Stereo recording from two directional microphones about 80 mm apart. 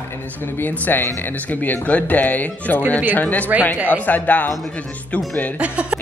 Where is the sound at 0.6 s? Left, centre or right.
Left.